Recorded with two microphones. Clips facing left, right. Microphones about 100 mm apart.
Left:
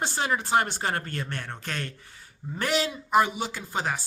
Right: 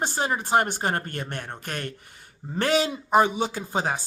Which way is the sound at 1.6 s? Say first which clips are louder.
Right 1 dB; 50° right (ahead or behind).